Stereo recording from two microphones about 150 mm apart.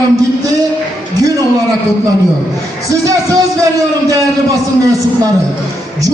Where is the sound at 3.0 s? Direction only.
20° right (ahead or behind).